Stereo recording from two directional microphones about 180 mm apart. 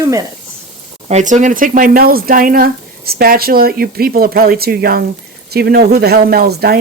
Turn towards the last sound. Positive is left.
turn(degrees=-60)  # may be behind; listen again after turning